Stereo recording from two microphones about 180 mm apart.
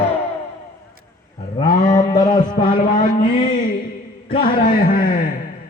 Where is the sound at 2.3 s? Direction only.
25° left (ahead or behind).